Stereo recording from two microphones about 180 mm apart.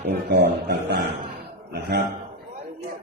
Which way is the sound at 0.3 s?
65° right (ahead or behind).